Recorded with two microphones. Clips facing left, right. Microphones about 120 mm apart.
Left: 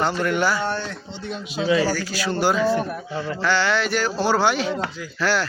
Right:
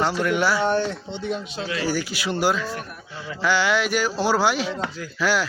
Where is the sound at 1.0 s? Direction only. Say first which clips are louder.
Right 4 dB; 15° right (ahead or behind).